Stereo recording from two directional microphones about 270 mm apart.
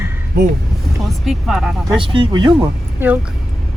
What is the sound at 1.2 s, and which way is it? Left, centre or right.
Speech, centre.